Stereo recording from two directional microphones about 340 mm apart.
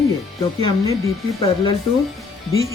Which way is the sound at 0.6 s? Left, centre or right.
Centre.